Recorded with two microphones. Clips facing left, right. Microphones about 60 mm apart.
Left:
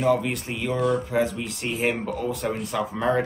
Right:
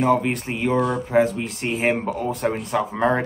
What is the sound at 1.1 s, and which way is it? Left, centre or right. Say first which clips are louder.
Speech: right 5 dB; right.